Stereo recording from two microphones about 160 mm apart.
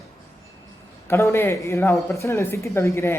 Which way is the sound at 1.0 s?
15° left (ahead or behind).